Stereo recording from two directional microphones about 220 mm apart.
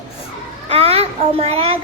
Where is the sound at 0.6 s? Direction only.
25° right (ahead or behind).